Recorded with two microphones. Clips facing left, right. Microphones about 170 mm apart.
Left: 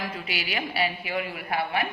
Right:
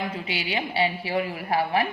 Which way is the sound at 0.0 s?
25° right (ahead or behind).